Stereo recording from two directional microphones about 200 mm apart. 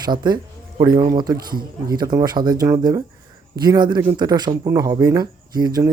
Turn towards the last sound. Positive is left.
turn(degrees=-20)  # may be behind; listen again after turning